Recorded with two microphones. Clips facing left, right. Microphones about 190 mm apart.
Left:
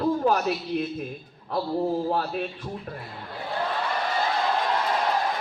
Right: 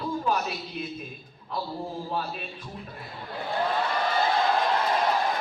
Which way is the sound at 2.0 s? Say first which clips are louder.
Left 6 dB; 60° left (ahead or behind).